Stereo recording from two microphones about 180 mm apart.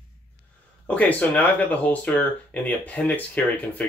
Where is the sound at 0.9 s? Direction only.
10° left (ahead or behind).